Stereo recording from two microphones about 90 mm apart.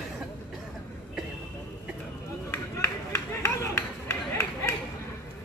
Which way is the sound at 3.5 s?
30° left (ahead or behind).